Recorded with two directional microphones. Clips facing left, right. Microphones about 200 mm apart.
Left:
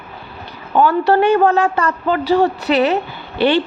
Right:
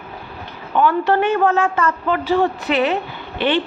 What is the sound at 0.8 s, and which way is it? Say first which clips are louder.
Speech: left 3 dB; 40° left (ahead or behind).